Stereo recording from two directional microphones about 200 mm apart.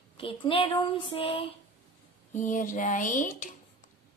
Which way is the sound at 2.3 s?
40° left (ahead or behind).